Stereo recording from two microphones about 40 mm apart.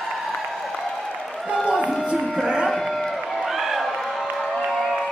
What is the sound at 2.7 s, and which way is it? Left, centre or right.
Run, centre.